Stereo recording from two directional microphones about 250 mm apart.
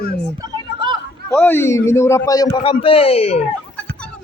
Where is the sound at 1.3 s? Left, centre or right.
Centre; by 3.4 s left.